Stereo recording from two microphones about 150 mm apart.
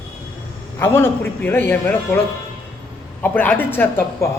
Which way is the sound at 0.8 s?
15° left (ahead or behind).